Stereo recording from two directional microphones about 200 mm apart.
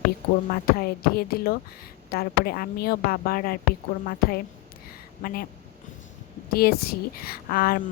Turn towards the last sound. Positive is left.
turn(degrees=45)  # may be behind; listen again after turning